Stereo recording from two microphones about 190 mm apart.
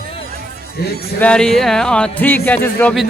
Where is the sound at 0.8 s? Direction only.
55° left (ahead or behind).